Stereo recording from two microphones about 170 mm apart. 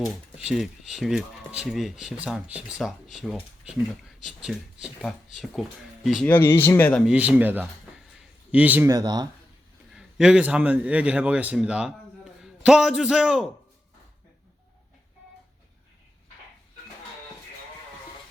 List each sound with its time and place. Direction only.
0.0 s speech: 5° right (ahead or behind)
6.2 s speech: 15° left (ahead or behind)
7.1 s speech: 10° right (ahead or behind)
9.9 s a man's voice: 5° right (ahead or behind)